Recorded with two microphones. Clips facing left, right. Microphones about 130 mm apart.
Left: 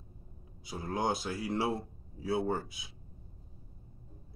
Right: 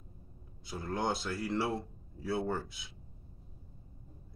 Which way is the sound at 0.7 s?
15° left (ahead or behind).